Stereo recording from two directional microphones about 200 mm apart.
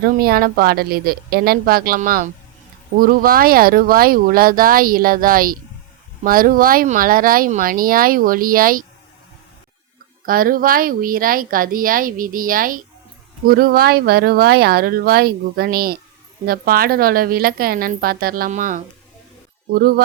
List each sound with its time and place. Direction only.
0.0 s speech: 45° right (ahead or behind)
10.2 s speech: 45° right (ahead or behind)